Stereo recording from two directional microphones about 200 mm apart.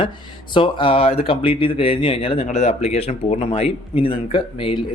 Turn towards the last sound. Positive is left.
turn(degrees=25)  # may be behind; listen again after turning